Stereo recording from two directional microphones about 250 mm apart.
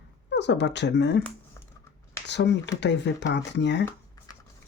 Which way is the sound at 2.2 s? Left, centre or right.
Left.